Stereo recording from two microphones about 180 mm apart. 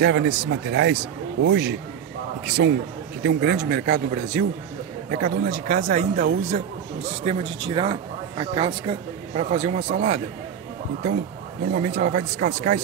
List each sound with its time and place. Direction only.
0.0 s speech: 75° right (ahead or behind)
2.4 s speech: 65° right (ahead or behind); by 10.2 s 40° right (ahead or behind)
11.6 s speech: 45° right (ahead or behind)